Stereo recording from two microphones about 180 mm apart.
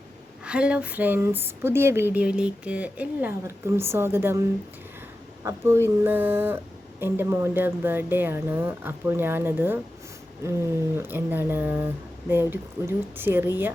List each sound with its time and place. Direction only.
0.4 s speech: 5° right (ahead or behind)